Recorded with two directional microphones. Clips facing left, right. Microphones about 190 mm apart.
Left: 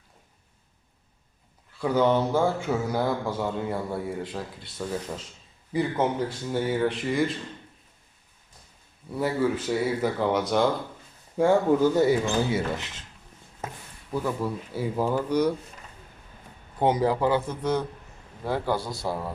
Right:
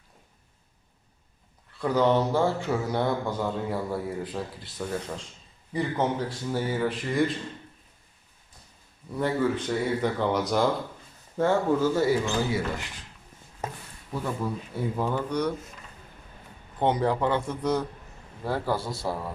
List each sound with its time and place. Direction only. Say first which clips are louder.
1.8 s a man's voice: even; centre (ahead or behind)
9.1 s a man's voice: left 1 dB; 5° left (ahead or behind)
11.3 s speech: left 3 dB; 15° left (ahead or behind)
14.7 s speech: left 3 dB; 5° left (ahead or behind)
16.8 s a man's voice: left 2 dB; 5° left (ahead or behind)